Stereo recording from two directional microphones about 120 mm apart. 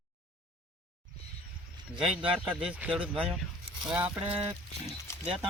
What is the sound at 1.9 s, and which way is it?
Speech, 10° right (ahead or behind).